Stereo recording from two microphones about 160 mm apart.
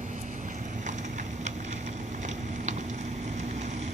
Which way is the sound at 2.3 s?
50° right (ahead or behind).